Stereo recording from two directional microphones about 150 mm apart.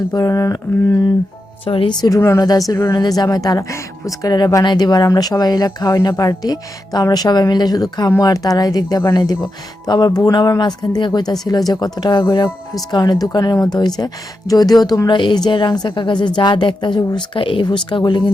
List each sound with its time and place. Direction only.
0.1 s a woman's voice: 25° left (ahead or behind)
1.6 s a woman's voice: 35° left (ahead or behind)
2.0 s a woman's voice: 20° left (ahead or behind)